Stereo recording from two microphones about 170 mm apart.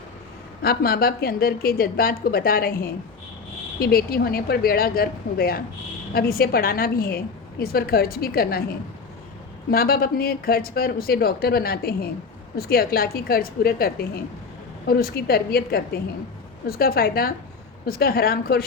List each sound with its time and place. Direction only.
0.6 s speech: 65° left (ahead or behind)